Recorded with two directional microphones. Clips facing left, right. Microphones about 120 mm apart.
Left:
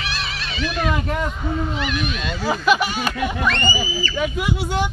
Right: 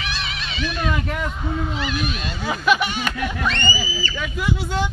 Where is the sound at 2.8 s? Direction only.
40° left (ahead or behind).